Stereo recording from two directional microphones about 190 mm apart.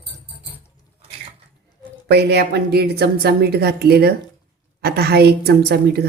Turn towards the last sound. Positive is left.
turn(degrees=-60)  # may be behind; listen again after turning